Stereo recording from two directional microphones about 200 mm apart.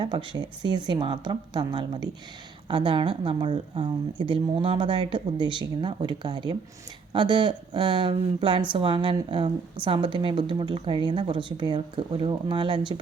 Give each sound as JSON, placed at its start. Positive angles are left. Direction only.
{"t": 0.0, "sound": "speech", "side_deg": -20}